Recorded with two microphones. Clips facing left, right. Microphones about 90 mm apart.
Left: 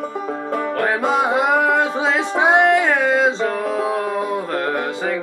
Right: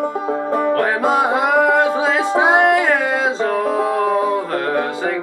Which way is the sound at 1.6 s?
Centre (ahead or behind).